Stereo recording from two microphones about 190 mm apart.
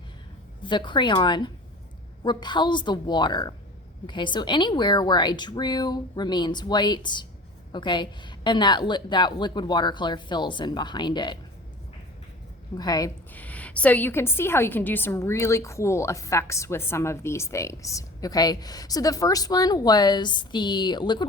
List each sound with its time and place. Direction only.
0.6 s a woman's voice: 25° left (ahead or behind)
12.7 s a woman's voice: 20° left (ahead or behind)
13.3 s a woman's voice: 10° left (ahead or behind)